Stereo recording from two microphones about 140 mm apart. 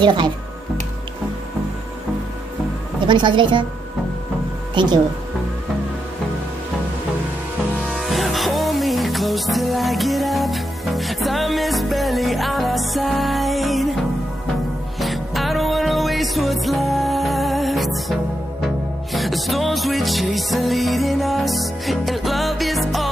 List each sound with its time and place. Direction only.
0.0 s a woman's voice: 35° right (ahead or behind)
3.1 s a woman's voice: 35° right (ahead or behind)
4.7 s a woman's voice: 30° right (ahead or behind)
7.9 s music: centre (ahead or behind)
15.0 s music: centre (ahead or behind)